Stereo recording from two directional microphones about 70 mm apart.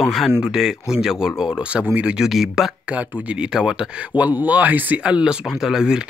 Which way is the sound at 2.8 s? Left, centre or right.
Right.